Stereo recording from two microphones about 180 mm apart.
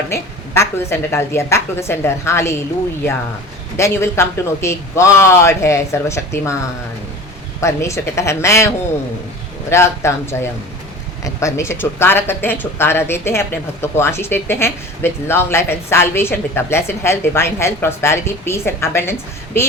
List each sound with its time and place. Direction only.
0.1 s a woman's voice: 15° left (ahead or behind)
3.8 s a woman's voice: 15° left (ahead or behind)
7.6 s a woman's voice: 15° left (ahead or behind)